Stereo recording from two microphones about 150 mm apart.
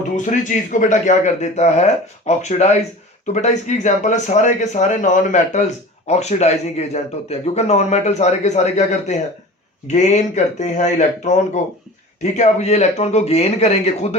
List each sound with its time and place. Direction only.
0.2 s speech: 55° left (ahead or behind)